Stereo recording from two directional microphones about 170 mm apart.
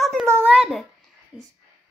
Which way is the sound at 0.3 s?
15° right (ahead or behind).